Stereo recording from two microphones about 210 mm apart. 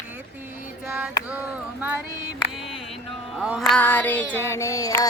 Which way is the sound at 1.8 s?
10° right (ahead or behind).